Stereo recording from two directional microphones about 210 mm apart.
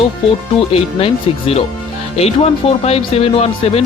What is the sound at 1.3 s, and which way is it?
Speech, 25° left (ahead or behind).